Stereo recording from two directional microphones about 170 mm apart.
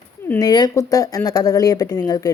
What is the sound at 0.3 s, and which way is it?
Speech, 25° left (ahead or behind).